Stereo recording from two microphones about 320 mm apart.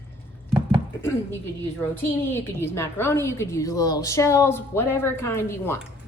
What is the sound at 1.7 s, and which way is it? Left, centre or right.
A woman's voice, centre.